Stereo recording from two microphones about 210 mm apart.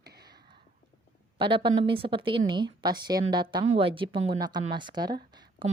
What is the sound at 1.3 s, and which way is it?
A woman's voice, 25° right (ahead or behind).